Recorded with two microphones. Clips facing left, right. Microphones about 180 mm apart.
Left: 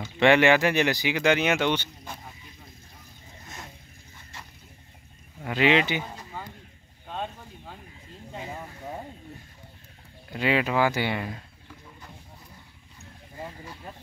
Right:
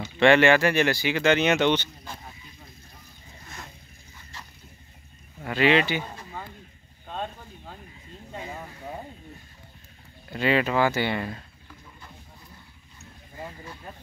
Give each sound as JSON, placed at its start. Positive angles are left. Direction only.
{"t": 0.2, "sound": "speech", "side_deg": 15}
{"t": 5.4, "sound": "speech", "side_deg": 15}
{"t": 7.1, "sound": "boat", "side_deg": 10}
{"t": 10.3, "sound": "speech", "side_deg": 10}